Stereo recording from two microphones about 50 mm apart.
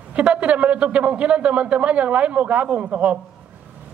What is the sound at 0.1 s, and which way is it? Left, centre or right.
A man's voice, right.